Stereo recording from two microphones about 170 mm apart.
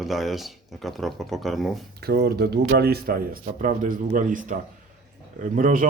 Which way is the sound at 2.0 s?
70° right (ahead or behind).